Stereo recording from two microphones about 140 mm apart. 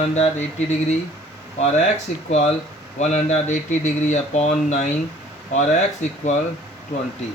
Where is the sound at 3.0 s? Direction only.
55° left (ahead or behind).